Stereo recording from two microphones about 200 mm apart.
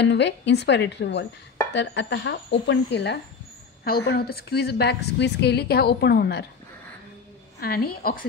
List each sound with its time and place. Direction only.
0.0 s a woman's voice: 60° left (ahead or behind)
7.6 s a woman's voice: 50° left (ahead or behind)